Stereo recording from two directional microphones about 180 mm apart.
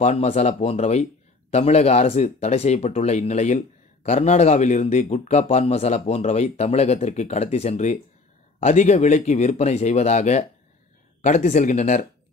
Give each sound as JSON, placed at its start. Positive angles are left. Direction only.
{"t": 0.0, "sound": "speech", "side_deg": 35}